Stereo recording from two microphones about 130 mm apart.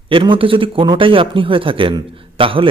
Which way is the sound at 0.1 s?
40° right (ahead or behind).